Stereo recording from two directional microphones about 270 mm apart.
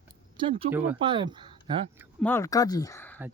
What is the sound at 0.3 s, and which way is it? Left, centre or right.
Speech, centre.